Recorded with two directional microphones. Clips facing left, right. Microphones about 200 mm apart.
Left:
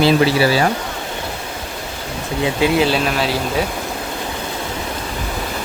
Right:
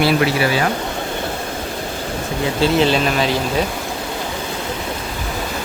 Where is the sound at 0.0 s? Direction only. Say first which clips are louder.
Left 2 dB; 25° left (ahead or behind).